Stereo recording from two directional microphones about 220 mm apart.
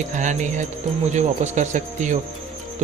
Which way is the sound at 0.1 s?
35° right (ahead or behind).